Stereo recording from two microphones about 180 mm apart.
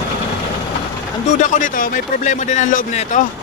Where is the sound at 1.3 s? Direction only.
45° left (ahead or behind).